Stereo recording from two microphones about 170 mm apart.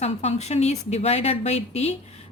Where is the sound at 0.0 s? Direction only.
40° left (ahead or behind).